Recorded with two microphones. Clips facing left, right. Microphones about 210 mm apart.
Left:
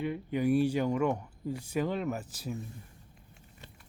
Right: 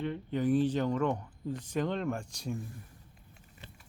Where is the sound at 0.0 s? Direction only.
10° left (ahead or behind).